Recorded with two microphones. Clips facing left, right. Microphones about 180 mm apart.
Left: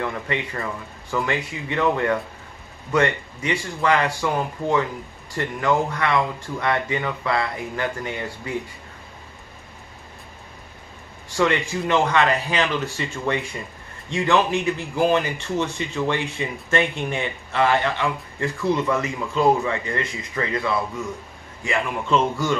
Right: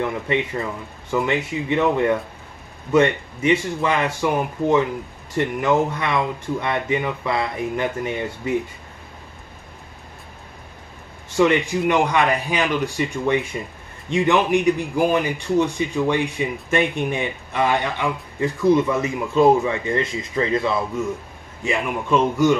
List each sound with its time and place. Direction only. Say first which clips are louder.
0.0 s speech: right 4 dB; 20° right (ahead or behind)
11.2 s speech: right 4 dB; 20° right (ahead or behind)